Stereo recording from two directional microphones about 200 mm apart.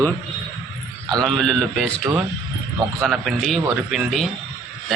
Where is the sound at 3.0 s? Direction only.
Centre (ahead or behind).